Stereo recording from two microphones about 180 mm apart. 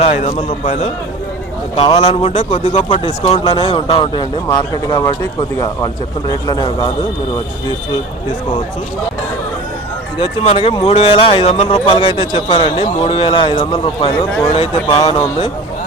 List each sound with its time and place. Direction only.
0.0 s speech: 40° left (ahead or behind); by 6.9 s 20° left (ahead or behind)
10.2 s speech: 35° left (ahead or behind)